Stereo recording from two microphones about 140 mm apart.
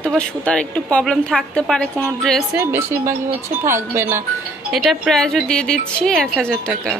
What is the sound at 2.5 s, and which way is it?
Speech, 15° right (ahead or behind).